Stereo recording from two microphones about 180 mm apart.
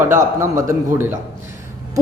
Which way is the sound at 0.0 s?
15° right (ahead or behind).